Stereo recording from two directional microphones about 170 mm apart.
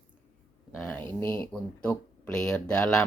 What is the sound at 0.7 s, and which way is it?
Speech, 5° left (ahead or behind).